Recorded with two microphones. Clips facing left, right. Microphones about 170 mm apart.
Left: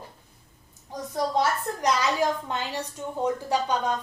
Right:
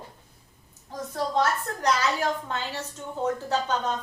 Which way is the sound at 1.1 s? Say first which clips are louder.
Left 1 dB; 15° left (ahead or behind).